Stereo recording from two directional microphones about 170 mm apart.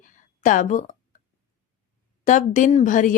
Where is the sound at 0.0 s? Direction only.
50° left (ahead or behind).